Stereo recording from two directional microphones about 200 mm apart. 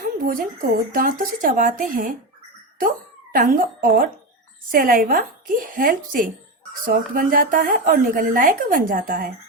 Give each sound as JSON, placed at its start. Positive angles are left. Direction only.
{"t": 0.0, "sound": "a sound", "side_deg": -45}
{"t": 0.9, "sound": "speech", "side_deg": -45}
{"t": 3.3, "sound": "speech", "side_deg": -45}